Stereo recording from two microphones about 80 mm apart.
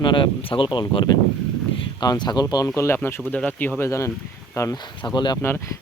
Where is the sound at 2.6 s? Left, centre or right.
Left.